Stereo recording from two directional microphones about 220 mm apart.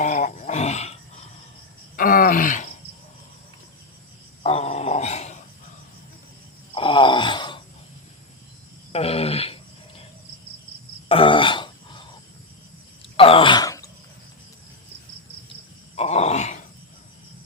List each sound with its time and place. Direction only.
0.0 s wild animals: 35° left (ahead or behind)
2.0 s groan: 40° left (ahead or behind)
4.4 s wail: 30° left (ahead or behind)
6.7 s wail: 25° left (ahead or behind)
8.9 s a sound: 25° left (ahead or behind)
11.1 s throat clearing: 25° left (ahead or behind)
13.1 s a sound: 25° left (ahead or behind)
16.0 s groan: 30° left (ahead or behind)